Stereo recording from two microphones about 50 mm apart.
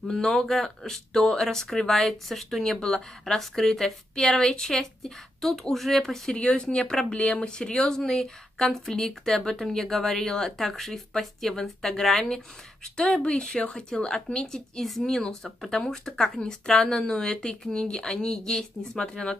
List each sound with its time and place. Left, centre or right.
0.1 s speech: centre
6.4 s speech: centre
12.8 s speech: left